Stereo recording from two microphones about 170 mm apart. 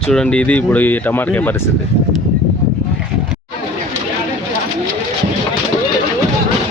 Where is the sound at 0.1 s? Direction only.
5° left (ahead or behind).